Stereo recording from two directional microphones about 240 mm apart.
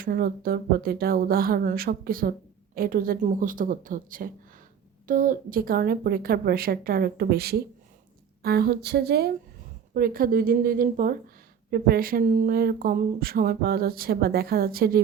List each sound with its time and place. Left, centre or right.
0.0 s speech: right